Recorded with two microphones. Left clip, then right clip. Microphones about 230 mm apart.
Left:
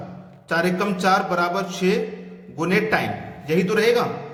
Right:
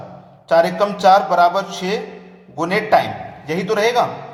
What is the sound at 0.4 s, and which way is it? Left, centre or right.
A man's voice, centre.